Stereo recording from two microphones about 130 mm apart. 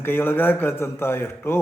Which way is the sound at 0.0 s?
15° left (ahead or behind).